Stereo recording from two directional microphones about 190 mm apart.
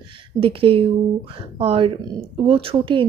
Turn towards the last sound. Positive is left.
turn(degrees=-25)  # may be behind; listen again after turning